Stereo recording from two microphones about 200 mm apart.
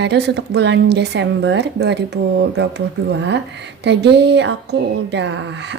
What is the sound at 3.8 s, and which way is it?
A woman's voice, 60° right (ahead or behind).